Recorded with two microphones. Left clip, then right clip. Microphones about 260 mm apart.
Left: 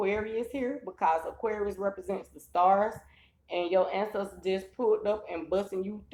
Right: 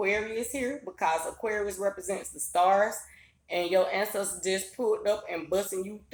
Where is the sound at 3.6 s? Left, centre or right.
Right.